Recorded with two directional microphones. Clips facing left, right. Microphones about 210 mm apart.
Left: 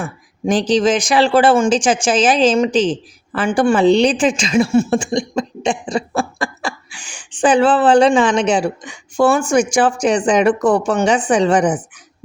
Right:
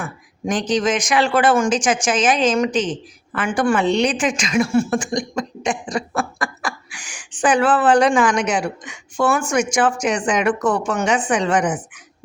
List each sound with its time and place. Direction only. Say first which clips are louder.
0.0 s speech: left 4 dB; 30° left (ahead or behind)